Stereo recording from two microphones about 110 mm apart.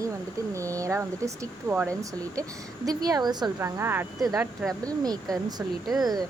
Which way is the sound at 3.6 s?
25° right (ahead or behind).